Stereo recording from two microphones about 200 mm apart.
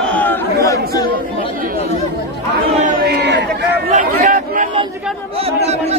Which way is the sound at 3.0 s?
55° right (ahead or behind).